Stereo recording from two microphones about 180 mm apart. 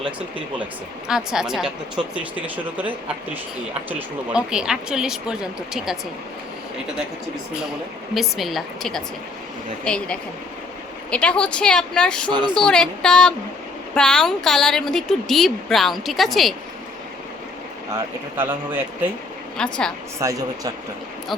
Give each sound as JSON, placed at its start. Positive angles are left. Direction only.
{"t": 1.0, "sound": "a woman's voice", "side_deg": -5}
{"t": 8.1, "sound": "a woman's voice", "side_deg": 0}
{"t": 17.9, "sound": "speech", "side_deg": -10}
{"t": 19.5, "sound": "a woman's voice", "side_deg": 5}
{"t": 20.1, "sound": "speech", "side_deg": -15}